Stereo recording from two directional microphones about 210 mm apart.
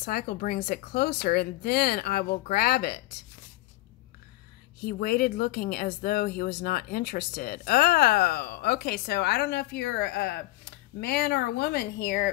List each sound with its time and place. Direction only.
0.0 s speech: 45° left (ahead or behind)
4.8 s speech: 45° left (ahead or behind)